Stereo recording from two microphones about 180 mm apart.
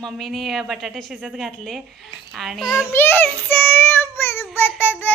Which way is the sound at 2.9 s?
15° left (ahead or behind).